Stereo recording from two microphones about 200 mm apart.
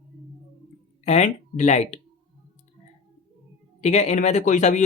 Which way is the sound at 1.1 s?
35° left (ahead or behind).